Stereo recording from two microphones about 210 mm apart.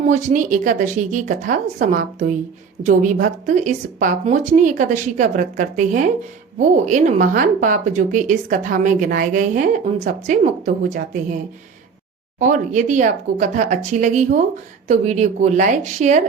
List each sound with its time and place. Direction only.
0.1 s a woman's voice: 35° right (ahead or behind)
12.4 s a woman's voice: 35° right (ahead or behind)